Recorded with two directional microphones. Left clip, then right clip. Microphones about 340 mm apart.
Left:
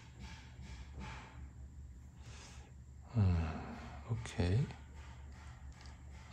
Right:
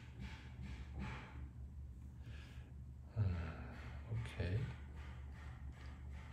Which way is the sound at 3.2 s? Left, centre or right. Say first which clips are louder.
Left 8 dB; centre.